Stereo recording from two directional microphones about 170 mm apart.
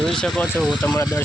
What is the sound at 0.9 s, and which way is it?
Speech, 20° left (ahead or behind).